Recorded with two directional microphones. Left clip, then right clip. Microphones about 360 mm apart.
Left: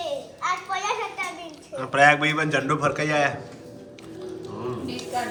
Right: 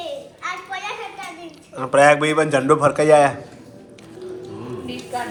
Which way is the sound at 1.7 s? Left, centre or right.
Centre.